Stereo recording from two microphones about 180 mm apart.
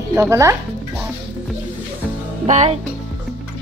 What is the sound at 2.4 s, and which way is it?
Music, 40° right (ahead or behind).